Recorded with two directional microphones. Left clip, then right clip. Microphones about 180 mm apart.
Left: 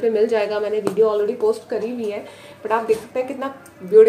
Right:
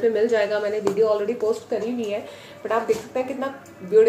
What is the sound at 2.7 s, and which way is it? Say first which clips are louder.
Speech: left 3 dB; 30° left (ahead or behind).